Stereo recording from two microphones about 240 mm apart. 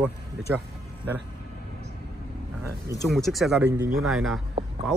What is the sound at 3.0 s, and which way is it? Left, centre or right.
Speech, centre.